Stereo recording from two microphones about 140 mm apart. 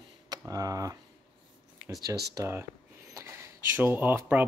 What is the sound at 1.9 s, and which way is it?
Speech, 25° right (ahead or behind).